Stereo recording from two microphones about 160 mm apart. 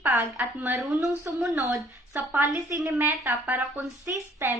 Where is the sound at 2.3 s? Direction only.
15° right (ahead or behind).